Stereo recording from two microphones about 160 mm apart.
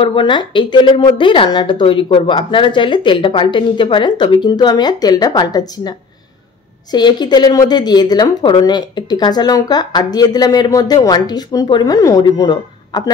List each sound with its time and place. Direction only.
0.0 s speech: 30° left (ahead or behind)